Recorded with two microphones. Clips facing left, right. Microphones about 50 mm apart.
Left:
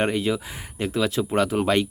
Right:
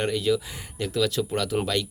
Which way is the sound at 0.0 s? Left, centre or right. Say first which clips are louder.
Left 1 dB; left.